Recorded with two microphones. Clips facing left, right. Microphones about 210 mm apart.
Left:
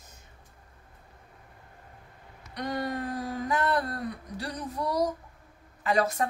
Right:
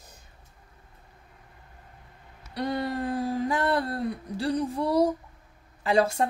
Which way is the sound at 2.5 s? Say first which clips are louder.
Right 3 dB; 30° right (ahead or behind).